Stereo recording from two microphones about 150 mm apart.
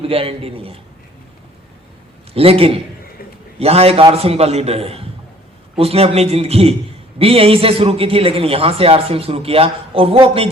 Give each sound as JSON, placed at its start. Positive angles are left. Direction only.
{"t": 0.0, "sound": "a man's voice", "side_deg": -40}
{"t": 2.3, "sound": "a man's voice", "side_deg": -40}